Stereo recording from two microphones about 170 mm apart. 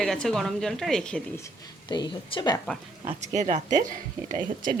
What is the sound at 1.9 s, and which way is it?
Speech, 25° left (ahead or behind).